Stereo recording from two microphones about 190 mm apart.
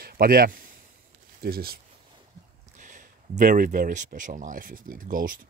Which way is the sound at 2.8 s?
45° right (ahead or behind).